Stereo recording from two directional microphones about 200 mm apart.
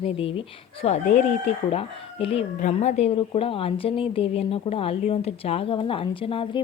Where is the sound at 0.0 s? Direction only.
25° left (ahead or behind).